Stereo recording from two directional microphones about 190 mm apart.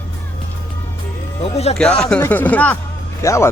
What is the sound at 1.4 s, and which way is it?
Speech, 30° left (ahead or behind).